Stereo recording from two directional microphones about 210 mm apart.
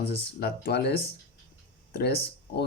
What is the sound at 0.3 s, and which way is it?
Speech, 50° left (ahead or behind).